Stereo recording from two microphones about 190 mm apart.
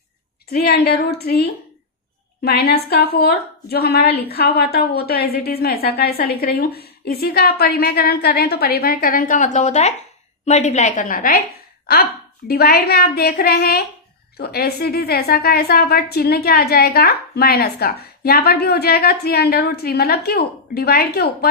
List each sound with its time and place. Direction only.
0.5 s a woman's voice: 55° left (ahead or behind)